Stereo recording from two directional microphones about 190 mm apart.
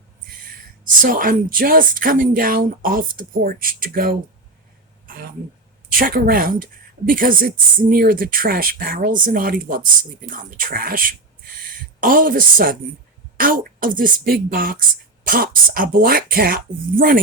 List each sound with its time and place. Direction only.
1.0 s speech: 45° right (ahead or behind)
5.0 s a sound: 50° right (ahead or behind)
5.9 s speech: 50° right (ahead or behind)